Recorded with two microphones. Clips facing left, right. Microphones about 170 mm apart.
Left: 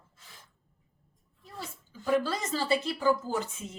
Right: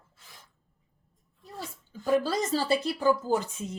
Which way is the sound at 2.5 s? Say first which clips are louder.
Even; 35° right (ahead or behind).